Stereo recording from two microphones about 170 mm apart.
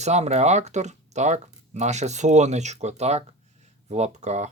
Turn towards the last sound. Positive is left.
turn(degrees=-40)  # may be behind; listen again after turning